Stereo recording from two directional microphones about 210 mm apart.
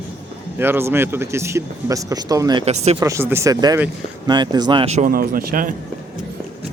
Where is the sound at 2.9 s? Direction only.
15° right (ahead or behind); by 5.8 s 40° right (ahead or behind).